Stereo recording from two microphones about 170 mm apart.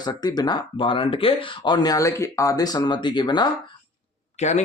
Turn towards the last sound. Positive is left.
turn(degrees=40)  # may be behind; listen again after turning